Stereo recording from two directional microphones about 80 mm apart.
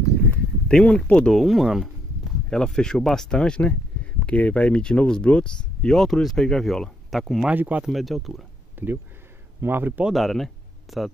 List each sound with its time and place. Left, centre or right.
0.7 s speech: centre
1.3 s speech: centre
2.5 s speech: centre
7.4 s speech: centre
7.8 s speech: centre
8.8 s speech: right
10.0 s speech: centre